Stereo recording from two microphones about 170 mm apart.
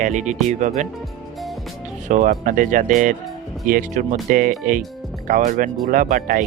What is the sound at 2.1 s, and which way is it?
Speech, 50° right (ahead or behind).